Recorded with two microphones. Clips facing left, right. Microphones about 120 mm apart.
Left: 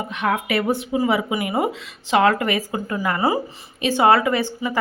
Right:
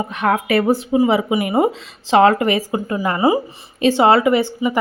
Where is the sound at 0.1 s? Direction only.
45° right (ahead or behind).